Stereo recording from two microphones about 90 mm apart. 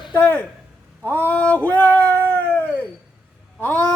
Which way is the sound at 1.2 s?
15° left (ahead or behind).